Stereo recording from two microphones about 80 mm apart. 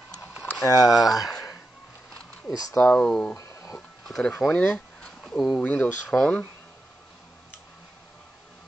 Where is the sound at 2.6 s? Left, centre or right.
Left.